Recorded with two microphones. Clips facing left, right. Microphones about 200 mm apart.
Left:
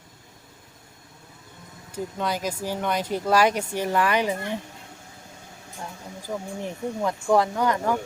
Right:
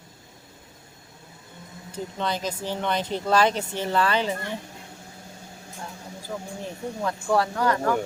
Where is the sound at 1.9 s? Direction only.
10° left (ahead or behind).